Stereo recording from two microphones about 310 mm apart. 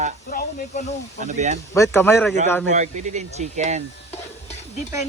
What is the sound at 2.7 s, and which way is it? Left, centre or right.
Speech, right.